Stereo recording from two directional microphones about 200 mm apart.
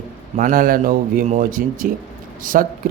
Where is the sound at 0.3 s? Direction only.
40° right (ahead or behind).